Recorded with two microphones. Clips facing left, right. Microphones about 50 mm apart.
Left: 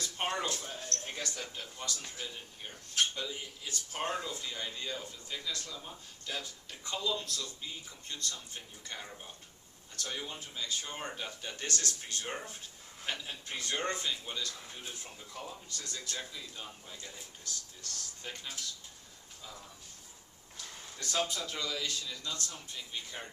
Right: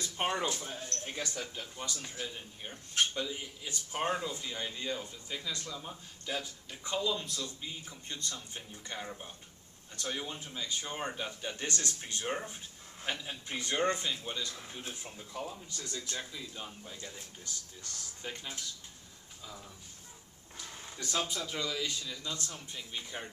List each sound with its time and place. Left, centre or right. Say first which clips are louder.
0.0 s speech: right 2 dB; centre
5.5 s speech: even; right
5.7 s speech: right 2 dB; centre
10.5 s speech: even; centre
11.1 s speech: right 3 dB; centre
12.2 s speech: right 7 dB; centre
14.1 s speech: right 1 dB; centre
17.4 s speech: even; centre
20.6 s a sound: right 2 dB; centre
21.4 s speech: right 1 dB; centre